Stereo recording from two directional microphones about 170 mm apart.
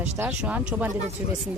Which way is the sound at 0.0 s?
10° right (ahead or behind).